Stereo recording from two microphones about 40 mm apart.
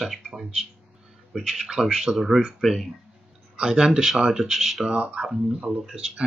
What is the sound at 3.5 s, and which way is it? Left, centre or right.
Speech, right.